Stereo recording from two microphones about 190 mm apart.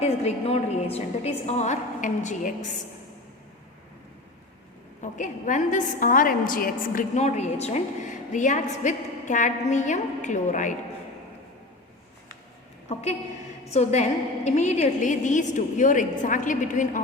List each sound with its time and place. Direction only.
0.0 s a woman's voice: 35° left (ahead or behind)
4.9 s a woman's voice: 40° left (ahead or behind)
12.9 s a woman's voice: 35° left (ahead or behind)